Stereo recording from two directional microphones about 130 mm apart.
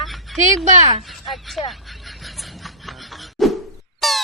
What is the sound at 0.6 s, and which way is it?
Speech, 60° right (ahead or behind).